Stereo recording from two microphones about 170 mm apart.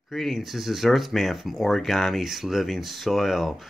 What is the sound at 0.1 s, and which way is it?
Speech, centre (ahead or behind).